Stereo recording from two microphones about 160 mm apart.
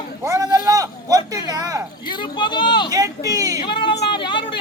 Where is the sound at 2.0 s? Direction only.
30° left (ahead or behind).